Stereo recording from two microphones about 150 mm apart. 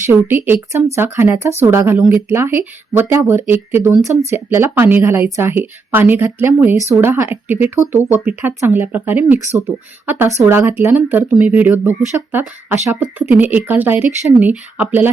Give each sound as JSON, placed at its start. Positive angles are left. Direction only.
{"t": 0.0, "sound": "speech", "side_deg": -15}